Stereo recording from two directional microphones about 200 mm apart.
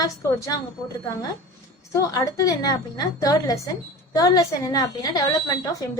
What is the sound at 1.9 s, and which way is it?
A woman's voice, 15° left (ahead or behind).